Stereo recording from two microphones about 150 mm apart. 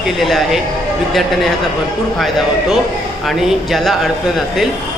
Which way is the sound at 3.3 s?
Centre (ahead or behind).